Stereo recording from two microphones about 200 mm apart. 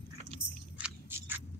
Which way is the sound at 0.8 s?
10° right (ahead or behind).